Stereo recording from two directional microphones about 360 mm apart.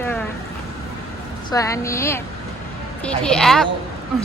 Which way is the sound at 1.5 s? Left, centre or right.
Centre.